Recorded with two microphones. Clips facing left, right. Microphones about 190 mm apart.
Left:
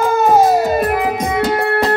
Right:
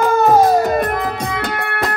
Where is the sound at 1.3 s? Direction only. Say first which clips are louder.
Left 7 dB; 25° left (ahead or behind).